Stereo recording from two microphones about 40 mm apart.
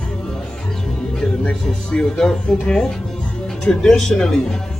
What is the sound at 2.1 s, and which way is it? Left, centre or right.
Speech, centre.